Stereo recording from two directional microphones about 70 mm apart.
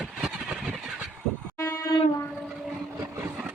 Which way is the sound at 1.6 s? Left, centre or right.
Left.